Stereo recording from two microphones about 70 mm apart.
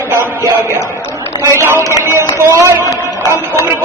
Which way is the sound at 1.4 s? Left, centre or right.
Right.